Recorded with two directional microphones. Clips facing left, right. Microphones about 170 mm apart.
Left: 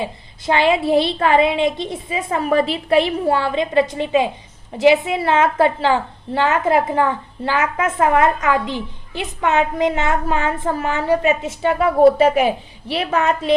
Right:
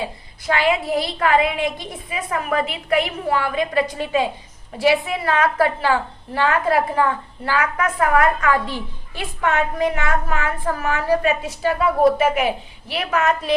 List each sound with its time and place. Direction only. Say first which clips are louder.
0.0 s a woman's voice: left 2 dB; 25° left (ahead or behind)